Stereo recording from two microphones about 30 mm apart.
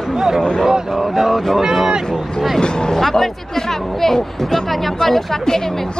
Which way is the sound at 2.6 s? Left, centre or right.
Left.